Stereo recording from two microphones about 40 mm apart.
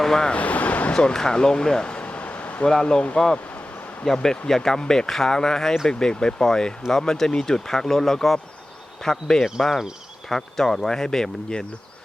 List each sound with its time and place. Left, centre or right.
0.0 s speech: centre
0.3 s a sound: left
0.9 s speech: centre
1.9 s a sound: left
2.6 s speech: centre
4.0 s speech: centre